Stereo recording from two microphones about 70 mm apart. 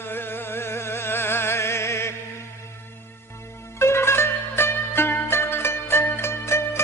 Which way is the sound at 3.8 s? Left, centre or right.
Left.